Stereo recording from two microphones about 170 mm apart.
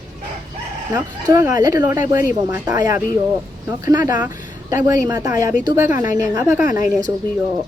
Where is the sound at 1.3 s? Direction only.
20° right (ahead or behind).